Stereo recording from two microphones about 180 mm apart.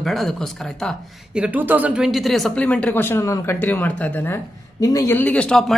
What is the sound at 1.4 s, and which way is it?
Speech, 10° right (ahead or behind).